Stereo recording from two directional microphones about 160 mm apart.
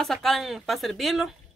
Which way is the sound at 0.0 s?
Centre (ahead or behind).